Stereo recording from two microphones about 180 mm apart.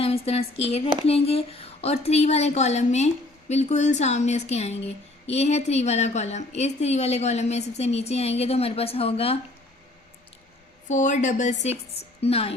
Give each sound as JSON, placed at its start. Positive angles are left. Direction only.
{"t": 0.0, "sound": "a woman's voice", "side_deg": 35}
{"t": 10.8, "sound": "a woman's voice", "side_deg": 45}